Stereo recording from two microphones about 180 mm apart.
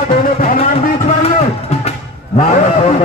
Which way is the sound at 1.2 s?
35° left (ahead or behind).